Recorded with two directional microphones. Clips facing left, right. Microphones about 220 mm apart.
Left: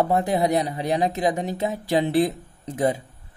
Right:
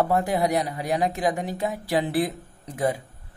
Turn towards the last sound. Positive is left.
turn(degrees=25)  # may be behind; listen again after turning